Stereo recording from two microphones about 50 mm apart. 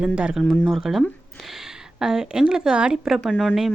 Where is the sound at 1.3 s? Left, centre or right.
Centre.